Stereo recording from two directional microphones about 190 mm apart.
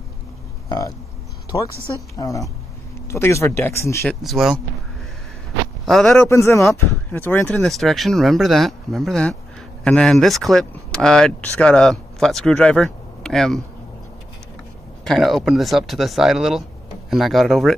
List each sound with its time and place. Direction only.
0.7 s speech: 20° left (ahead or behind)
2.1 s speech: 15° left (ahead or behind)
4.1 s speech: centre (ahead or behind)
5.9 s speech: centre (ahead or behind)
6.2 s speech: 15° left (ahead or behind)
15.0 s speech: centre (ahead or behind)